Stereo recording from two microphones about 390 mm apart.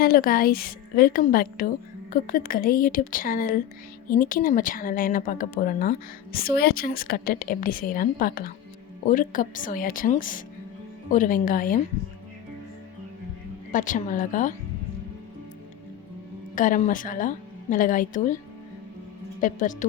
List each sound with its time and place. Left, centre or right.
0.0 s a woman's voice: left
13.7 s a woman's voice: centre
16.6 s a woman's voice: centre
19.4 s a woman's voice: centre